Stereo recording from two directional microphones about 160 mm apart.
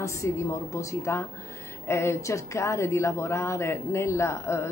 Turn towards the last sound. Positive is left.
turn(degrees=15)  # may be behind; listen again after turning